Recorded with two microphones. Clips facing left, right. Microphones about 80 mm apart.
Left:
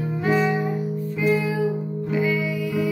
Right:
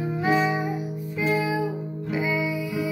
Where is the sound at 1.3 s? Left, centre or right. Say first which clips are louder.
Left 3 dB; centre.